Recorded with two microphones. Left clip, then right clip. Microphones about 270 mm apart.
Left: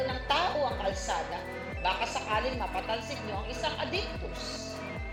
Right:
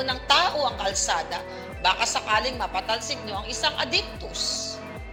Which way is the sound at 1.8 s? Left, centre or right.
Right.